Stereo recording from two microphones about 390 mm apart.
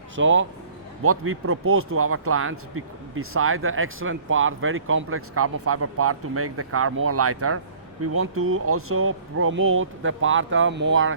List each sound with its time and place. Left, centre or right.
0.2 s speech: right